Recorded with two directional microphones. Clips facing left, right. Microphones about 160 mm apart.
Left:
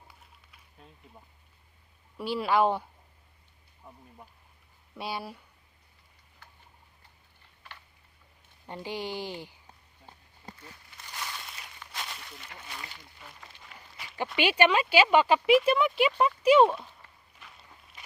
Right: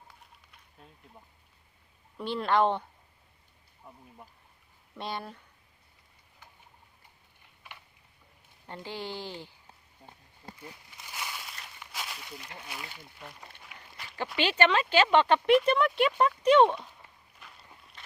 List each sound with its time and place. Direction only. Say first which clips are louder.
0.2 s bird: right 1 dB; centre (ahead or behind)
2.1 s speech: left 1 dB; 5° left (ahead or behind)
3.9 s speech: even; 5° right (ahead or behind)
8.6 s speech: left 3 dB; 15° left (ahead or behind)
10.0 s speech: right 1 dB; 30° right (ahead or behind)
10.6 s a sound: right 3 dB; 10° right (ahead or behind)
12.5 s speech: left 1 dB; 10° right (ahead or behind)
13.7 s walk: left 1 dB; centre (ahead or behind)
14.3 s speech: left 2 dB; 10° left (ahead or behind)